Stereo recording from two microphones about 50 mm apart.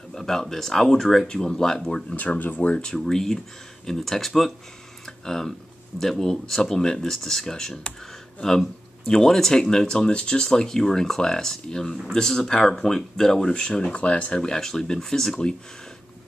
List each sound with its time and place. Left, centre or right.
0.1 s speech: centre
2.1 s speech: left
2.7 s speech: centre
5.0 s a sound: centre
5.9 s speech: centre